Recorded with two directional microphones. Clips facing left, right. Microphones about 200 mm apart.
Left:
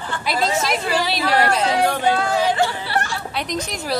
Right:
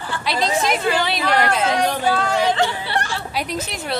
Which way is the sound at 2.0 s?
20° left (ahead or behind).